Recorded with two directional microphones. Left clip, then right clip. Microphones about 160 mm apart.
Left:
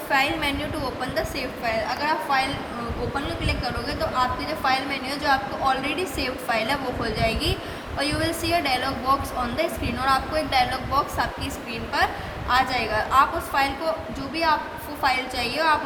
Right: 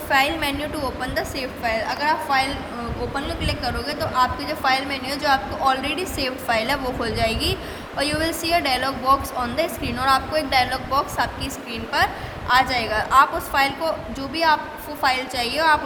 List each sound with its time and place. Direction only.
0.1 s a woman's voice: 45° right (ahead or behind)